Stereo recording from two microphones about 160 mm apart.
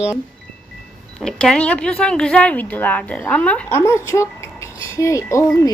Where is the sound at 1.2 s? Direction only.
5° left (ahead or behind).